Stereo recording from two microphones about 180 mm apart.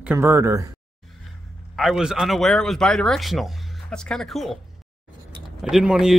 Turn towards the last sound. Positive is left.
turn(degrees=-5)  # may be behind; listen again after turning